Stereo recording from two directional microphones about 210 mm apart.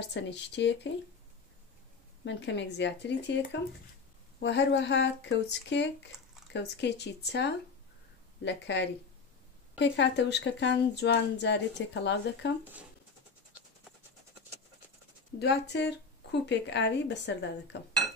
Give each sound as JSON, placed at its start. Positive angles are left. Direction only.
{"t": 0.0, "sound": "speech", "side_deg": 55}
{"t": 2.2, "sound": "speech", "side_deg": 60}
{"t": 4.4, "sound": "speech", "side_deg": 55}
{"t": 15.3, "sound": "speech", "side_deg": 50}